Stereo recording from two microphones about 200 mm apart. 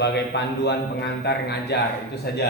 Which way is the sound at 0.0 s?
55° left (ahead or behind).